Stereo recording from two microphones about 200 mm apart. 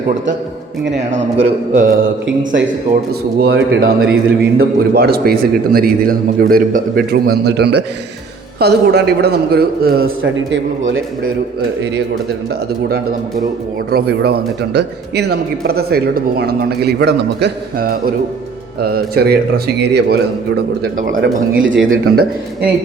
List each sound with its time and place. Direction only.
0.9 s speech: 35° right (ahead or behind)
3.1 s a man's voice: 55° right (ahead or behind)
13.9 s a man's voice: 50° right (ahead or behind)
21.6 s speech: 70° right (ahead or behind)
21.8 s a man's voice: 50° right (ahead or behind)